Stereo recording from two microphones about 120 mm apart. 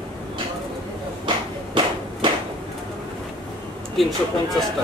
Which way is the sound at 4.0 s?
Centre (ahead or behind).